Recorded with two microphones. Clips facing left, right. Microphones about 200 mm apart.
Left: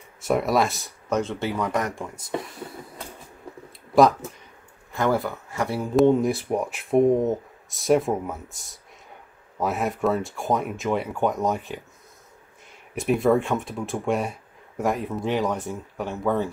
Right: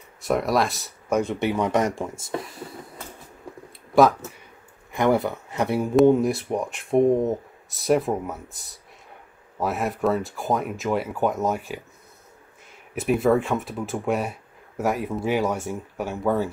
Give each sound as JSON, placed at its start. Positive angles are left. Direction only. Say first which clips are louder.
{"t": 0.2, "sound": "speech", "louder": "even", "side_deg": 0}
{"t": 1.0, "sound": "speech", "louder": "right 2 dB", "side_deg": -15}
{"t": 2.3, "sound": "speech", "louder": "left 4 dB", "side_deg": 0}
{"t": 4.9, "sound": "speech", "louder": "right 3 dB", "side_deg": -20}
{"t": 5.9, "sound": "speech", "louder": "right 1 dB", "side_deg": 0}
{"t": 12.9, "sound": "speech", "louder": "even", "side_deg": 0}